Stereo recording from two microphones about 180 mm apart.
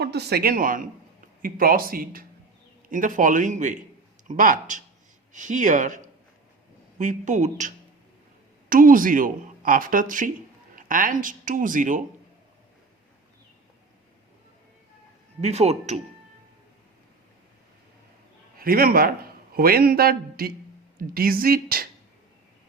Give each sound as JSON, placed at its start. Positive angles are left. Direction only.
{"t": 0.0, "sound": "speech", "side_deg": -65}
{"t": 8.7, "sound": "speech", "side_deg": -50}
{"t": 15.4, "sound": "a man's voice", "side_deg": -35}
{"t": 18.5, "sound": "a man's voice", "side_deg": -55}